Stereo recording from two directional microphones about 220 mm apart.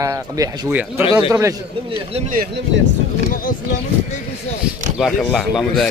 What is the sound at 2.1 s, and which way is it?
Speech, 35° right (ahead or behind).